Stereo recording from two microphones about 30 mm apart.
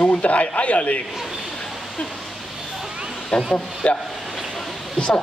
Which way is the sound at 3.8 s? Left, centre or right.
Left.